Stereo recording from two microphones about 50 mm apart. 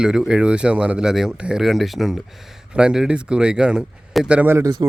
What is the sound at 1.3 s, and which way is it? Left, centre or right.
Speech, right.